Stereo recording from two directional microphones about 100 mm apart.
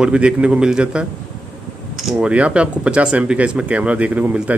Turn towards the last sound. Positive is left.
turn(degrees=-10)  # may be behind; listen again after turning